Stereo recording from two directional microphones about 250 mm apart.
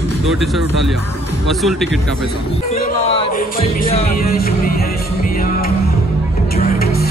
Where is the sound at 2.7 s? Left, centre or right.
Left.